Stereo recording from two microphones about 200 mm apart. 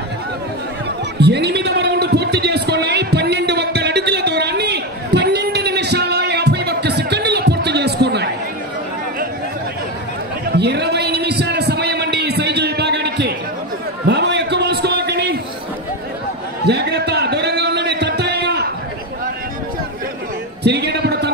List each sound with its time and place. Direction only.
1.2 s music: 55° right (ahead or behind)
10.5 s a sound: 55° right (ahead or behind)
16.6 s music: 55° right (ahead or behind)
20.6 s music: 55° right (ahead or behind)